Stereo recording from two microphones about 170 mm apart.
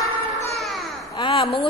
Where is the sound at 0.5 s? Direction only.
Centre (ahead or behind).